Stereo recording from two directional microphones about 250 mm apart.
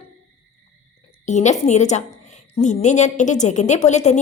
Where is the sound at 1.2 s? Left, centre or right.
Left.